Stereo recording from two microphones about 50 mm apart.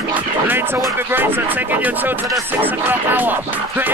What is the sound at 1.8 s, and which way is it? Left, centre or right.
Speech, right.